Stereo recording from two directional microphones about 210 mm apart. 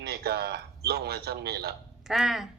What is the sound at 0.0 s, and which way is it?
Speech, 50° right (ahead or behind).